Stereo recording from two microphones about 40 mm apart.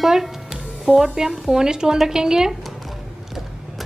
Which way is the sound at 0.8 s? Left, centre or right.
Centre.